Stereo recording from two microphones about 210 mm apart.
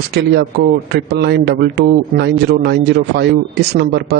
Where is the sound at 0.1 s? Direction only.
50° right (ahead or behind).